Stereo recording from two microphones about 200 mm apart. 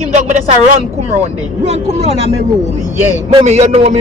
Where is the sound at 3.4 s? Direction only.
30° right (ahead or behind).